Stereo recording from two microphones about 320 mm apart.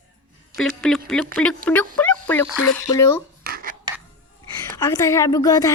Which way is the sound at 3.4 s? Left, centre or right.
Right.